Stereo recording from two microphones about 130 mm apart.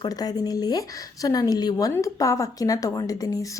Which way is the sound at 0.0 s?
30° left (ahead or behind).